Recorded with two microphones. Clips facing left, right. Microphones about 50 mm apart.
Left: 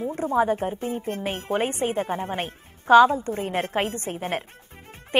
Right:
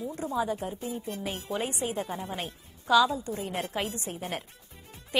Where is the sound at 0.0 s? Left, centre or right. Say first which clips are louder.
Left 8 dB; left.